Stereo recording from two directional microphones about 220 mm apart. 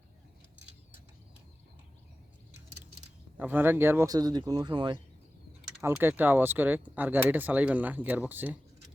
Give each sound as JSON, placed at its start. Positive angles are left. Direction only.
{"t": 3.3, "sound": "speech", "side_deg": -10}